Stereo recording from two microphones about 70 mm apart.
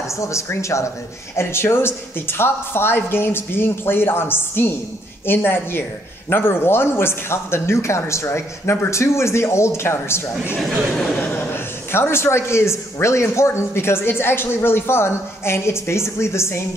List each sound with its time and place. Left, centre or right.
0.1 s a man's voice: left
11.2 s a man's voice: left